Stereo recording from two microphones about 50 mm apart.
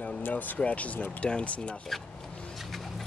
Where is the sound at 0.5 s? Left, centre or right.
Left.